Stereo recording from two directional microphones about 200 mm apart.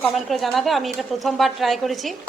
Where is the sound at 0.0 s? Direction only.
Centre (ahead or behind).